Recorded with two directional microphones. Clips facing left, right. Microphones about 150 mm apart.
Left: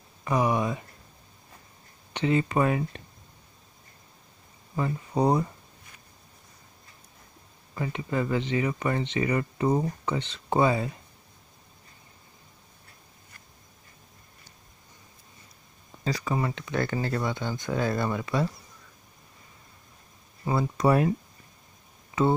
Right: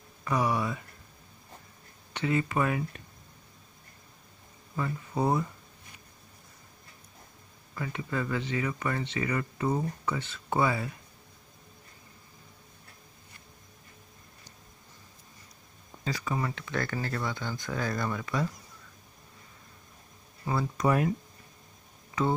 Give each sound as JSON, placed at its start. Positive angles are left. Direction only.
{"t": 0.2, "sound": "a sound", "side_deg": 15}
{"t": 2.1, "sound": "speech", "side_deg": 25}
{"t": 4.7, "sound": "speech", "side_deg": 20}
{"t": 7.7, "sound": "speech", "side_deg": 25}
{"t": 16.0, "sound": "speech", "side_deg": 35}
{"t": 20.7, "sound": "speech", "side_deg": 35}